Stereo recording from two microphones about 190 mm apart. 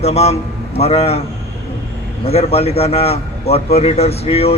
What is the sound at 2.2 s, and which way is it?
A man's voice, 30° left (ahead or behind).